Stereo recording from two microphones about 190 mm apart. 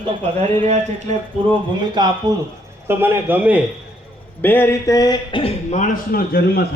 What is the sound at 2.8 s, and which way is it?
Speech, 10° right (ahead or behind).